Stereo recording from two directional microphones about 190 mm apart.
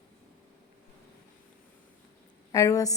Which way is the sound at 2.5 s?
15° left (ahead or behind).